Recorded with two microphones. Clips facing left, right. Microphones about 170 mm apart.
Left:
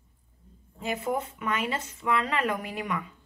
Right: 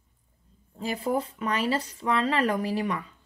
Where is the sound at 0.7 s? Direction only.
35° right (ahead or behind).